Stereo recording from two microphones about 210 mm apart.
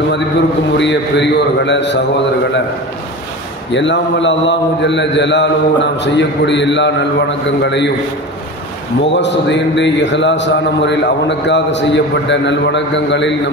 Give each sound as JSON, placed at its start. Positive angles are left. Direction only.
{"t": 0.7, "sound": "a man's voice", "side_deg": 55}
{"t": 3.7, "sound": "a man's voice", "side_deg": 60}
{"t": 9.1, "sound": "a man's voice", "side_deg": 55}